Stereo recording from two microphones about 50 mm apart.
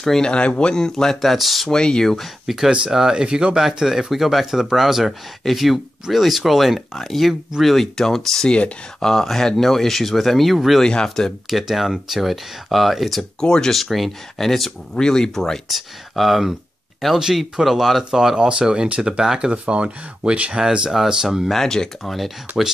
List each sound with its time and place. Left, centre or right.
0.0 s speech: centre
0.3 s speech: left; by 1.7 s centre
1.7 s speech: centre
2.4 s speech: centre
8.5 s speech: left
9.0 s speech: centre
10.8 s speech: centre
11.4 s speech: centre
13.4 s speech: centre
13.7 s speech: centre
15.7 s speech: centre
19.5 s speech: right; by 22.3 s centre